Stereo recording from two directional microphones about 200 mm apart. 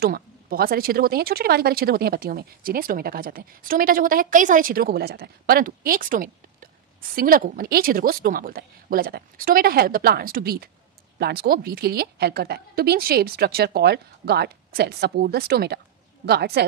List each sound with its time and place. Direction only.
0.0 s speech: 45° right (ahead or behind)